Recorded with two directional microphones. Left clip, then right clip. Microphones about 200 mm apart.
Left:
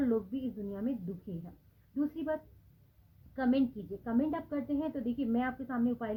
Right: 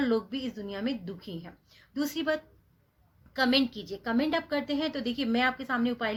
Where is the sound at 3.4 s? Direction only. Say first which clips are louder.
Right 6 dB; 25° right (ahead or behind).